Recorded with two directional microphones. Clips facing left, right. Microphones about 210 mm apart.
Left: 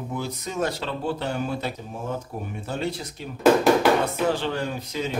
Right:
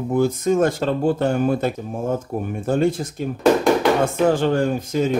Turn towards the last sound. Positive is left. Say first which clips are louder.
# right 9 dB
turn(degrees=-50)  # may be behind; listen again after turning